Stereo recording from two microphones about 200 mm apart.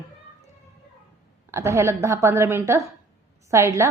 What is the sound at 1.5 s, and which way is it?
A woman's voice, 15° right (ahead or behind).